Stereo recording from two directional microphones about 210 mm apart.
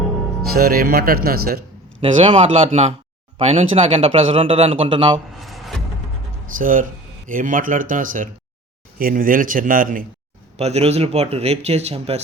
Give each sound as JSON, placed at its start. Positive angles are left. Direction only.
{"t": 0.5, "sound": "speech", "side_deg": -45}
{"t": 2.0, "sound": "speech", "side_deg": -25}
{"t": 5.4, "sound": "music", "side_deg": 0}
{"t": 6.6, "sound": "speech", "side_deg": -40}
{"t": 10.6, "sound": "speech", "side_deg": -30}